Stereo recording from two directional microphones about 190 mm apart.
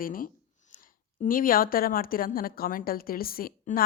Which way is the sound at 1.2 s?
45° left (ahead or behind).